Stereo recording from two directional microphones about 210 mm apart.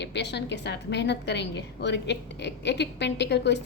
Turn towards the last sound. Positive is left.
turn(degrees=55)  # may be behind; listen again after turning